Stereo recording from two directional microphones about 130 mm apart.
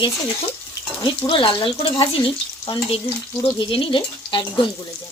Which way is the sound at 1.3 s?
40° left (ahead or behind).